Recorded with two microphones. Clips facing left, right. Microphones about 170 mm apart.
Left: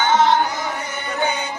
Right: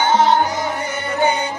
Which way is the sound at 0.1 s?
35° right (ahead or behind).